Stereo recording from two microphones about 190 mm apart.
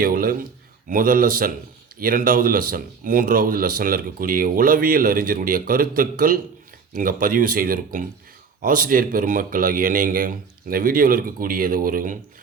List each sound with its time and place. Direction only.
0.0 s speech: 50° right (ahead or behind)